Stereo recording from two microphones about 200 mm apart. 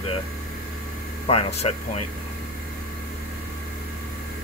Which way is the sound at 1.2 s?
30° left (ahead or behind).